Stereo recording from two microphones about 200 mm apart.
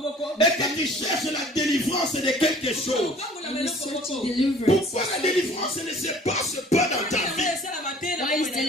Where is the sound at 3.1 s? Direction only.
30° left (ahead or behind).